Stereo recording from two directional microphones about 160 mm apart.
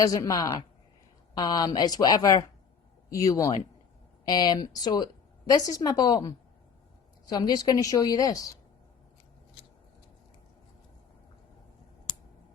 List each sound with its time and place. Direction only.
0.0 s a woman's voice: 20° left (ahead or behind)